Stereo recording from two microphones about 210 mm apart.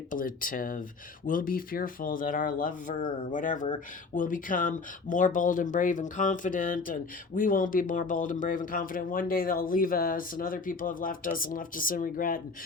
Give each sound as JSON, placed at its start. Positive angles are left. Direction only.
{"t": 0.1, "sound": "speech", "side_deg": 40}